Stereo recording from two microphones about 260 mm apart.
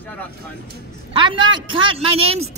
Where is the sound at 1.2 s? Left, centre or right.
Centre.